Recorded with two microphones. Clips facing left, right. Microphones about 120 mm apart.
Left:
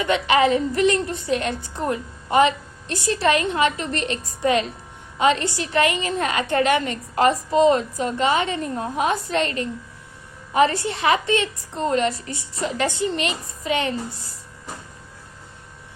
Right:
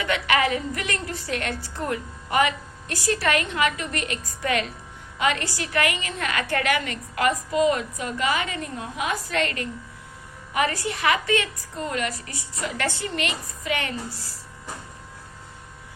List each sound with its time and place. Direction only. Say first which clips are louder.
0.0 s a woman's voice: left 5 dB; 25° left (ahead or behind)